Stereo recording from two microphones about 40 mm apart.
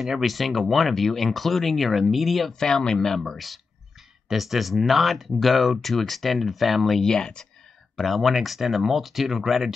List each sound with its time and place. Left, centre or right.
0.0 s speech: centre
2.6 s speech: centre
7.0 s speech: centre
7.9 s speech: centre